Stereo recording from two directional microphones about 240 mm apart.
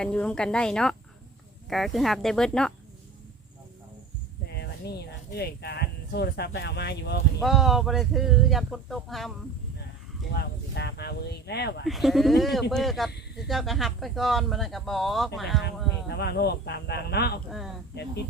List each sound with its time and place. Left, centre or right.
0.0 s speech: centre
4.5 s speech: left
7.3 s speech: centre
10.3 s speech: left
11.9 s speech: centre
15.6 s speech: left